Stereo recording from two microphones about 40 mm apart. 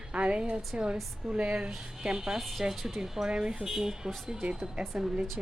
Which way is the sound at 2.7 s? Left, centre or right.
Centre.